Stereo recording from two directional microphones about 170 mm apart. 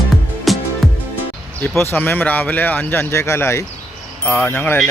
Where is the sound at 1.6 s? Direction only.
15° left (ahead or behind).